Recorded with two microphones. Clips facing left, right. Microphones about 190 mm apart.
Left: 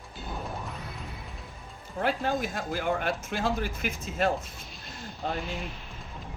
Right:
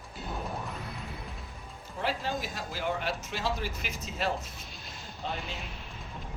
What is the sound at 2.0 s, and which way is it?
Speech, 55° left (ahead or behind).